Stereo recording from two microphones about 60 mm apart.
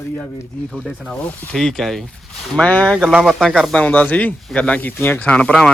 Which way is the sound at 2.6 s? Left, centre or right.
Left.